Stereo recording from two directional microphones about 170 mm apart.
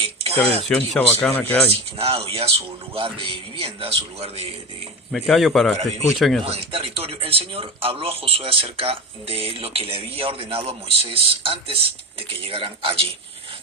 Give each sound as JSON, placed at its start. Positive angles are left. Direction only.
{"t": 0.0, "sound": "a sound", "side_deg": -35}
{"t": 0.7, "sound": "speech", "side_deg": 10}
{"t": 1.7, "sound": "speech", "side_deg": -35}
{"t": 5.1, "sound": "speech", "side_deg": 0}
{"t": 6.4, "sound": "speech", "side_deg": -35}